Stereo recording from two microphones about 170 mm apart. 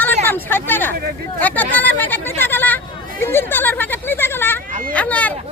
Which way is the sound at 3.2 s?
15° left (ahead or behind).